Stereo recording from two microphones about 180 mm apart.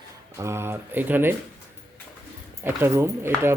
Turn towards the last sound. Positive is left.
turn(degrees=-15)  # may be behind; listen again after turning